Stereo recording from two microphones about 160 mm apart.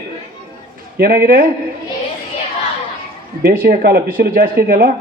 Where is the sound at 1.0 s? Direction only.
70° right (ahead or behind).